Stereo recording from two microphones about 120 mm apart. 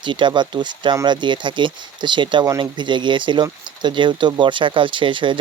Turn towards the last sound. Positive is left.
turn(degrees=-45)  # may be behind; listen again after turning